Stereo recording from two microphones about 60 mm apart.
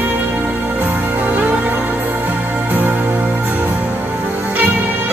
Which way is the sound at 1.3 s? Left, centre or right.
Right.